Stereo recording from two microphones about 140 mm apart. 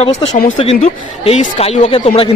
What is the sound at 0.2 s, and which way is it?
Speech, 40° left (ahead or behind).